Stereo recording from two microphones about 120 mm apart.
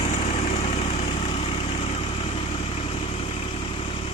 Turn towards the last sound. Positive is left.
turn(degrees=55)  # may be behind; listen again after turning